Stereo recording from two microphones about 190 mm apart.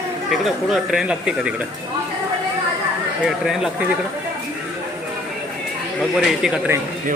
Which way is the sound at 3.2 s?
Centre (ahead or behind).